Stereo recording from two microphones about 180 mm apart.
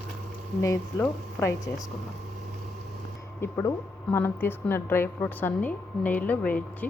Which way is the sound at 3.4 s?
15° left (ahead or behind).